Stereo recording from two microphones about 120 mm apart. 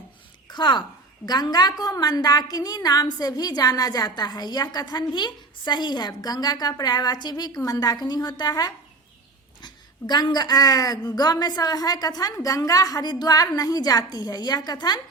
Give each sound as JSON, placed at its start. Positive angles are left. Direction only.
{"t": 0.4, "sound": "a woman's voice", "side_deg": 40}